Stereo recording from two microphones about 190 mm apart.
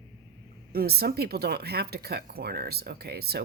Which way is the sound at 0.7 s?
55° right (ahead or behind).